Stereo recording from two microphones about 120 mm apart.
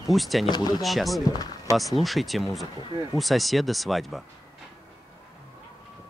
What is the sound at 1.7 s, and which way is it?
Speech, centre (ahead or behind).